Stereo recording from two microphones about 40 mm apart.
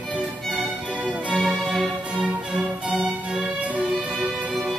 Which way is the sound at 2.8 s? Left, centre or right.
Centre.